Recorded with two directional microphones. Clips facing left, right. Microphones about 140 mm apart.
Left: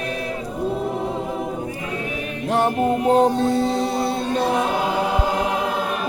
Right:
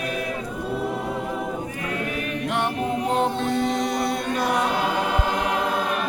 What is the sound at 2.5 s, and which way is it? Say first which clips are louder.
Music: left 7 dB; 35° left (ahead or behind).